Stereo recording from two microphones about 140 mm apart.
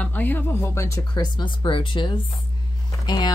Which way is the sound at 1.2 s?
35° left (ahead or behind).